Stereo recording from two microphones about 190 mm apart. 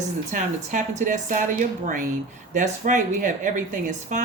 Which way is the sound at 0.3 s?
40° right (ahead or behind).